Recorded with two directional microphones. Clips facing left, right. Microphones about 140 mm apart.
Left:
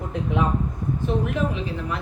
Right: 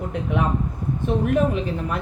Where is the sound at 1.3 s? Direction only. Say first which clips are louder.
Right 5 dB; 50° right (ahead or behind).